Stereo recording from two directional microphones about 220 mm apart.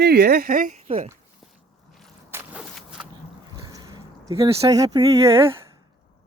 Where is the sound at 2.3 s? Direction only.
5° right (ahead or behind).